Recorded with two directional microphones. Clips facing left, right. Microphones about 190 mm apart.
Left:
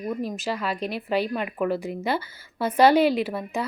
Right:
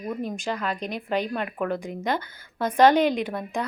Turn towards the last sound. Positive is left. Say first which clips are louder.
# left 1 dB
turn(degrees=5)  # may be behind; listen again after turning